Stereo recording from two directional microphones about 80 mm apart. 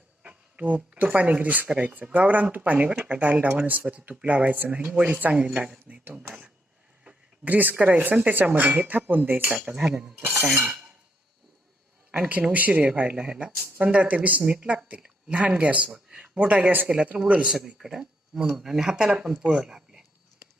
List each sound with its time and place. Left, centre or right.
0.2 s speech: centre
5.9 s speech: right
9.5 s speech: centre
10.2 s speech: right
10.5 s speech: centre
12.1 s speech: centre